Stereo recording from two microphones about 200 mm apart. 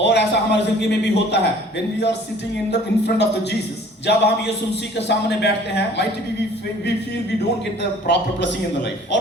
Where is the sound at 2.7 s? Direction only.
55° left (ahead or behind).